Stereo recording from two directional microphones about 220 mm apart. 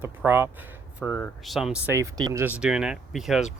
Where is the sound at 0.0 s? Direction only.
10° right (ahead or behind).